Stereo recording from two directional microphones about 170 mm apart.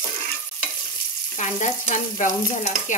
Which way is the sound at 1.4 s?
45° left (ahead or behind).